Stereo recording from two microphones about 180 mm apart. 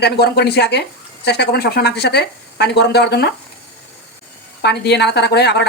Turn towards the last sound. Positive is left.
turn(degrees=65)  # may be behind; listen again after turning